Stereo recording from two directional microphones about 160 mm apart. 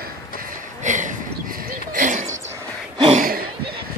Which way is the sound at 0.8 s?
50° right (ahead or behind).